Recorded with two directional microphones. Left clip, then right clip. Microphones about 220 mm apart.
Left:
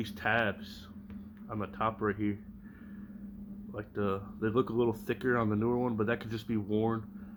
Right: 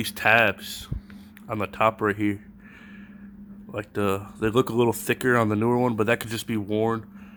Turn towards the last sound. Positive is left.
turn(degrees=-45)  # may be behind; listen again after turning